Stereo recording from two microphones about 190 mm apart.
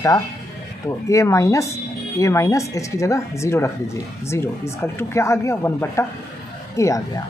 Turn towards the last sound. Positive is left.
turn(degrees=15)  # may be behind; listen again after turning